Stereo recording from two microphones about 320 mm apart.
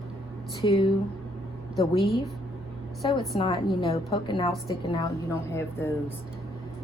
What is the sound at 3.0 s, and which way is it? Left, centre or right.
A woman's voice, centre.